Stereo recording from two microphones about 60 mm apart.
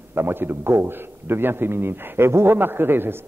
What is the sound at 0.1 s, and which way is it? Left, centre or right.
A man's voice, right.